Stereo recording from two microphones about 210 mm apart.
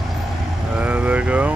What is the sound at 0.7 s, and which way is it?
Vehicle, 5° right (ahead or behind).